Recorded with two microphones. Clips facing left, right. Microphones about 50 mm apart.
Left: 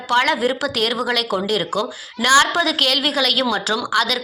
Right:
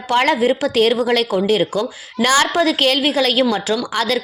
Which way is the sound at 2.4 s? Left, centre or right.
Right.